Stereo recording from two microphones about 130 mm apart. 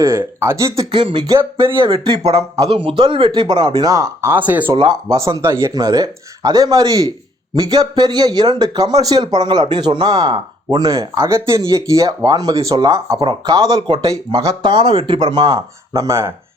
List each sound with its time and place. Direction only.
0.0 s speech: 20° right (ahead or behind)
0.9 s speech: 40° right (ahead or behind)
1.3 s speech: 20° right (ahead or behind)
1.8 s speech: 40° right (ahead or behind); by 4.7 s 15° right (ahead or behind)
4.8 s speech: 30° right (ahead or behind)